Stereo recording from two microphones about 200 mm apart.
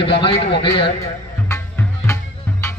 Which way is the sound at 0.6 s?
25° left (ahead or behind).